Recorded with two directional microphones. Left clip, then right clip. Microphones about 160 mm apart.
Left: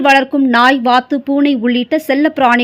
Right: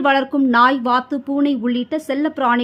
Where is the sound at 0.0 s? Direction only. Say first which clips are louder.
Left 6 dB; 10° left (ahead or behind).